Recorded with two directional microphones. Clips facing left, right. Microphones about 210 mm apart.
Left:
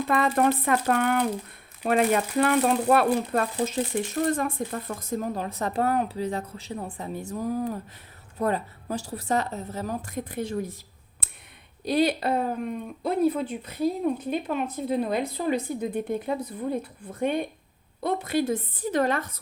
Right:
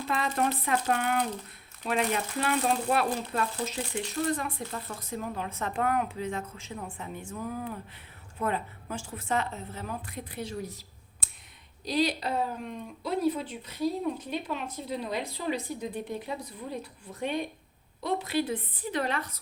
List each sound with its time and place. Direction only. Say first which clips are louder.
0.1 s speech: left 6 dB; 55° left (ahead or behind)
11.9 s speech: left 5 dB; 60° left (ahead or behind)